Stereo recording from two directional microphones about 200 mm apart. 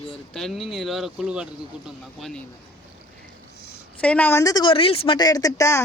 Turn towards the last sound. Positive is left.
turn(degrees=15)  # may be behind; listen again after turning